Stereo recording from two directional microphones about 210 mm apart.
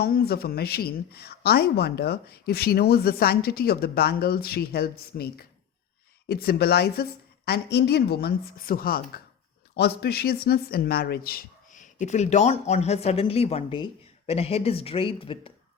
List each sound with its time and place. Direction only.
0.0 s a woman's voice: 45° left (ahead or behind); by 15.5 s 25° left (ahead or behind)